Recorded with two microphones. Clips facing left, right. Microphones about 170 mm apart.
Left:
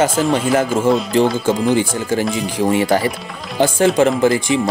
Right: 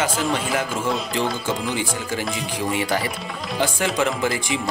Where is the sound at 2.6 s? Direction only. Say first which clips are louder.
Left 9 dB; 40° left (ahead or behind).